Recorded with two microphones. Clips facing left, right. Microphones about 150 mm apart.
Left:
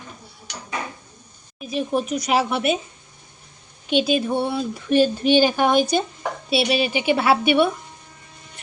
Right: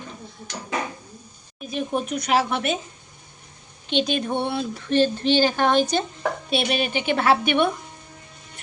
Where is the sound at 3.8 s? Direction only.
10° left (ahead or behind).